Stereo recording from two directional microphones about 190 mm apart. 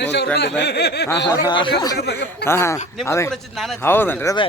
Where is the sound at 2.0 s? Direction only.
60° left (ahead or behind).